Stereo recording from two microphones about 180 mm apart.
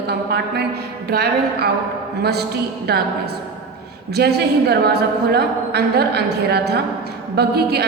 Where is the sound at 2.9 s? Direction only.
60° right (ahead or behind).